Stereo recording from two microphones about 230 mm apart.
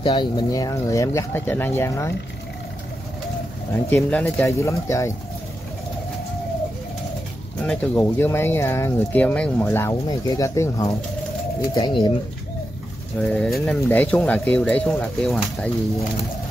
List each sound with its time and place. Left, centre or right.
0.0 s speech: centre
3.9 s speech: centre
7.6 s speech: centre
13.2 s speech: centre